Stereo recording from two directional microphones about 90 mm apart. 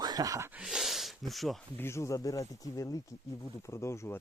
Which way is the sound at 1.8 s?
30° left (ahead or behind).